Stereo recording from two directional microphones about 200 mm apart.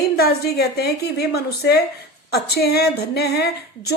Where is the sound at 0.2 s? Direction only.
50° left (ahead or behind).